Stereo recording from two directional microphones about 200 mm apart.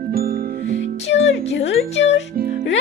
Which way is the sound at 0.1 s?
45° right (ahead or behind).